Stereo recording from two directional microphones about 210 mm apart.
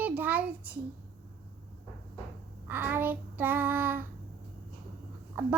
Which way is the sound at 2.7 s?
10° right (ahead or behind).